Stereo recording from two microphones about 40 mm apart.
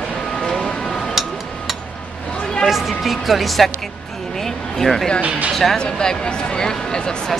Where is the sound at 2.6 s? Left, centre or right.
Centre.